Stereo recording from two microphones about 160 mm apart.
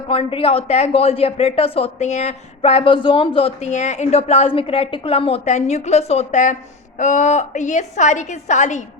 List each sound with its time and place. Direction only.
0.1 s a woman's voice: 35° left (ahead or behind)